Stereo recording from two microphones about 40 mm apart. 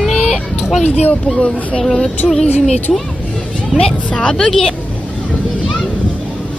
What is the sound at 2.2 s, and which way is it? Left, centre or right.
Speech, centre.